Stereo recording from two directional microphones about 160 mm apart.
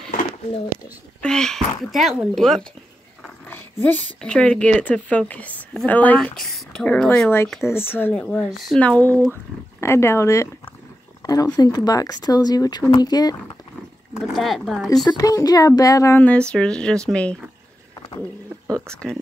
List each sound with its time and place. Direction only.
1.2 s speech: 5° left (ahead or behind)
3.4 s speech: 10° left (ahead or behind)
14.2 s speech: centre (ahead or behind)
15.0 s speech: 20° left (ahead or behind); by 17.4 s 5° left (ahead or behind)
18.9 s speech: 5° left (ahead or behind)